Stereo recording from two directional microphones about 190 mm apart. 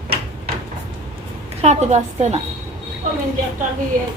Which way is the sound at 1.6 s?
35° right (ahead or behind).